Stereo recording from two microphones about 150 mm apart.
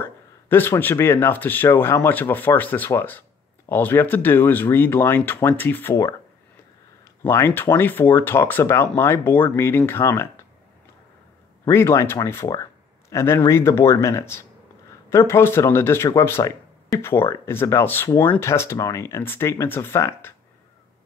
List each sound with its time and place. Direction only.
0.0 s speech: 15° left (ahead or behind)
7.2 s speech: 15° left (ahead or behind)
11.7 s speech: 15° left (ahead or behind)